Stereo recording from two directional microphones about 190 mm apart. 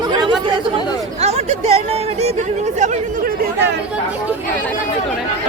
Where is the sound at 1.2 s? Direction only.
35° right (ahead or behind).